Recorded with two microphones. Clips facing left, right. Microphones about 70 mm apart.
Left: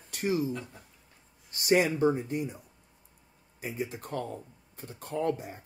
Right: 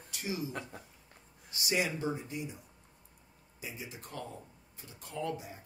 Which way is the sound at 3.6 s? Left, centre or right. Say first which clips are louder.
Left 9 dB; left.